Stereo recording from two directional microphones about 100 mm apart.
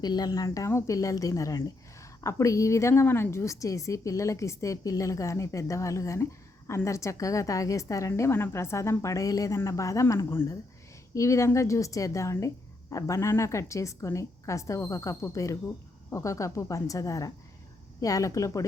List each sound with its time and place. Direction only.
0.0 s a woman's voice: 40° left (ahead or behind)